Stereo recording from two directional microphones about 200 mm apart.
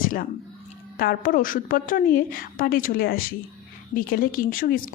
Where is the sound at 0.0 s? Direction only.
45° left (ahead or behind).